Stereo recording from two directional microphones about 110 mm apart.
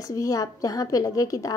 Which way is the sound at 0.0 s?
30° left (ahead or behind).